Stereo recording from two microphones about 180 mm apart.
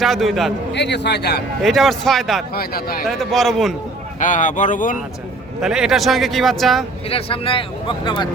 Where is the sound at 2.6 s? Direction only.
55° left (ahead or behind).